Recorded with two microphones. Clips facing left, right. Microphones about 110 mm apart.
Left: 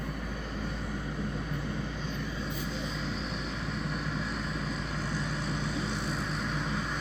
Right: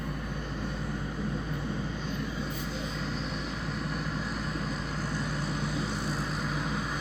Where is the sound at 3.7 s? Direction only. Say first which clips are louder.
Even; centre (ahead or behind).